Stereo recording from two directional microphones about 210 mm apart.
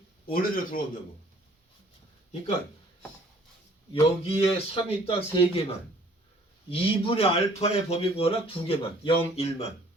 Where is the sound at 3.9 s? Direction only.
25° left (ahead or behind).